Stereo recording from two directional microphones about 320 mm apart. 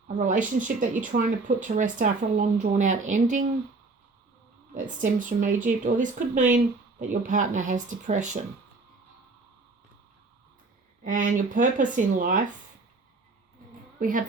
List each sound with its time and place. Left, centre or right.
0.1 s speech: right
4.7 s speech: right
11.0 s speech: right
14.0 s speech: right